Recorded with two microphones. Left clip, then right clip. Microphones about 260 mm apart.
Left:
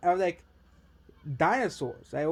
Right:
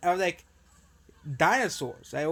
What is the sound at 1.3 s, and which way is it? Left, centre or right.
Speech, centre.